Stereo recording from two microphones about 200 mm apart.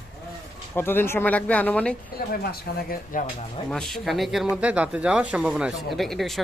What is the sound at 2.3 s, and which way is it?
Speech, 50° left (ahead or behind).